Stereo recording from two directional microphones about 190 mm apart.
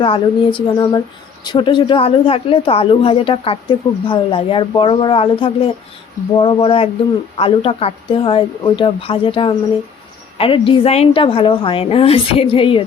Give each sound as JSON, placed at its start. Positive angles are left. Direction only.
{"t": 0.0, "sound": "speech", "side_deg": 25}